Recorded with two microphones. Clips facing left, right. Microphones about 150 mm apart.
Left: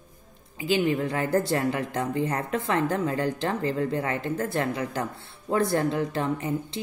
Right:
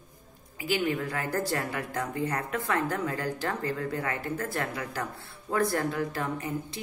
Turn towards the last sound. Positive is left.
turn(degrees=25)  # may be behind; listen again after turning